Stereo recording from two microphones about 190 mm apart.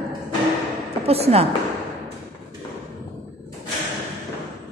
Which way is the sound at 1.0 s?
30° right (ahead or behind).